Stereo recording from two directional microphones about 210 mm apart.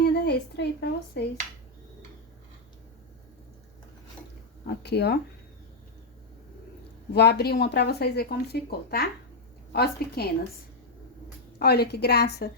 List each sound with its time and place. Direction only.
0.0 s a sound: 50° left (ahead or behind)
4.6 s speech: 50° left (ahead or behind)
7.1 s speech: 50° left (ahead or behind)
11.6 s speech: 50° left (ahead or behind)